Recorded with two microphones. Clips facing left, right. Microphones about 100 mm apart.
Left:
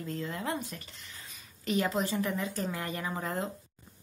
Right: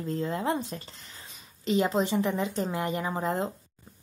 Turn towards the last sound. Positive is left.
turn(degrees=-25)  # may be behind; listen again after turning